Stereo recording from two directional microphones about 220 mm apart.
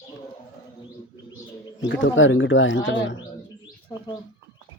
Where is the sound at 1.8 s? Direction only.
60° left (ahead or behind).